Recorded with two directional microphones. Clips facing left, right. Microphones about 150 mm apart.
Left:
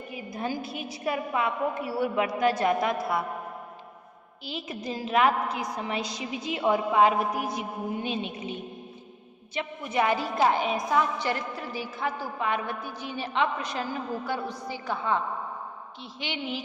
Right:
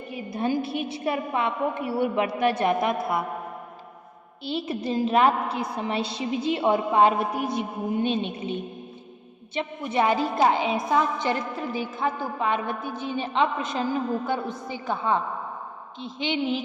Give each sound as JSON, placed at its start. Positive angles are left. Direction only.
{"t": 0.3, "sound": "a woman's voice", "side_deg": -20}
{"t": 4.4, "sound": "a woman's voice", "side_deg": -30}
{"t": 9.6, "sound": "a woman's voice", "side_deg": -25}